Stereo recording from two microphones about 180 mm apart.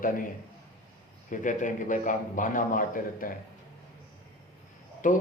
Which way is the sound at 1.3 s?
45° left (ahead or behind).